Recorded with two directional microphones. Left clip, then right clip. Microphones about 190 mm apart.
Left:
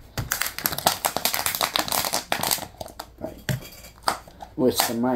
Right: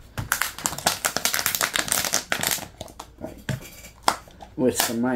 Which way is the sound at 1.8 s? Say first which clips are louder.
Even; 5° right (ahead or behind).